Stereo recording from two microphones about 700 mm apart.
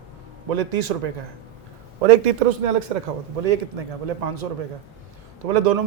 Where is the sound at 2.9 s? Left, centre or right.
Right.